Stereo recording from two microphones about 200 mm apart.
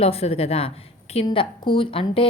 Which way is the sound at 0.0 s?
30° left (ahead or behind).